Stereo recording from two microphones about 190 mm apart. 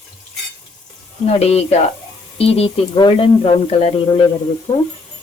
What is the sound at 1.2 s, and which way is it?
Speech, 35° left (ahead or behind).